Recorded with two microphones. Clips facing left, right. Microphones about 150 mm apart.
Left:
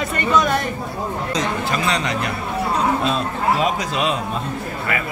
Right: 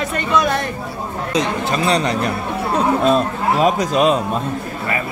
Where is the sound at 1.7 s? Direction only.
35° right (ahead or behind).